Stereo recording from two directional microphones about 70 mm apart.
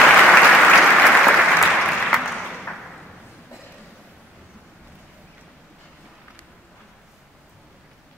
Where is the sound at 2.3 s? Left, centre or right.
Centre.